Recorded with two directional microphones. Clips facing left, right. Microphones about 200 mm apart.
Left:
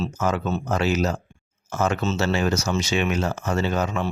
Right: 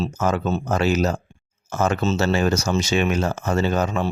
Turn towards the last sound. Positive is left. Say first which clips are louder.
# right 2 dB
turn(degrees=-35)  # may be behind; listen again after turning